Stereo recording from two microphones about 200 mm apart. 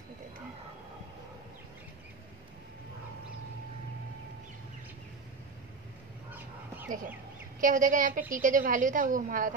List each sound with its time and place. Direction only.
6.9 s a woman's voice: 40° right (ahead or behind)